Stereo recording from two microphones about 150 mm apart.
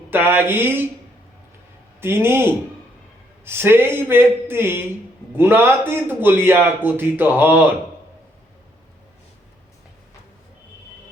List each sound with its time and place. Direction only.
0.1 s a man's voice: 15° right (ahead or behind)
2.0 s a man's voice: 15° right (ahead or behind)